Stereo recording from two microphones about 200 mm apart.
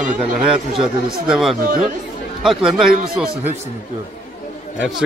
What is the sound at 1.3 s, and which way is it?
A man's voice, centre (ahead or behind).